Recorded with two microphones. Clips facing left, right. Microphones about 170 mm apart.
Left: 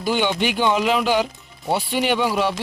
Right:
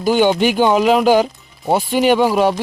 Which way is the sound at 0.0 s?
45° right (ahead or behind).